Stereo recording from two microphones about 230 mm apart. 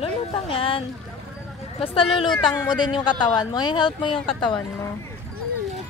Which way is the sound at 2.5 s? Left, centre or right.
Centre.